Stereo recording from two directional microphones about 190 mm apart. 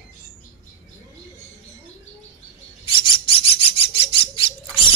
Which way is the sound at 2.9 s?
25° left (ahead or behind).